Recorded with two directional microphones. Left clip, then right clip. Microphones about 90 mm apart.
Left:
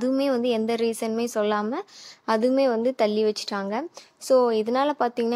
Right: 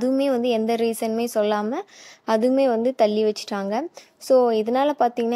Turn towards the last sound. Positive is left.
turn(degrees=-30)  # may be behind; listen again after turning